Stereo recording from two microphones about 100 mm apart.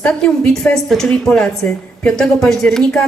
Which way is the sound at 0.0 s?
5° left (ahead or behind).